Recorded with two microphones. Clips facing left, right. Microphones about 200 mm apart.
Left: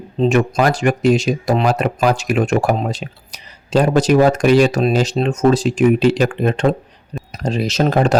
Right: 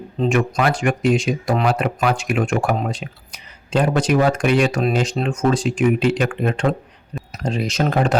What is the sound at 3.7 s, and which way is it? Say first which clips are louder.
Speech: left 4 dB; 40° left (ahead or behind).